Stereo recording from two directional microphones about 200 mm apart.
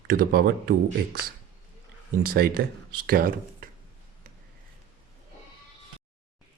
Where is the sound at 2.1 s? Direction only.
45° right (ahead or behind).